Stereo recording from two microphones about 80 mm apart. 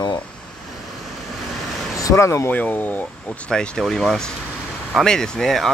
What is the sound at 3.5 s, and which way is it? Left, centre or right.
Speech, centre.